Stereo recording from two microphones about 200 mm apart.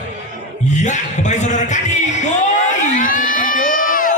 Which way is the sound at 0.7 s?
35° left (ahead or behind).